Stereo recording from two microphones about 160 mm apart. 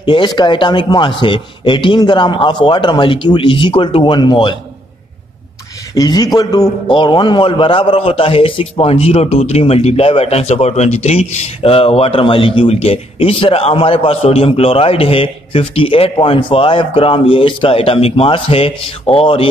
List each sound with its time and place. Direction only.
0.0 s a man's voice: 30° left (ahead or behind)
5.9 s a man's voice: 25° left (ahead or behind)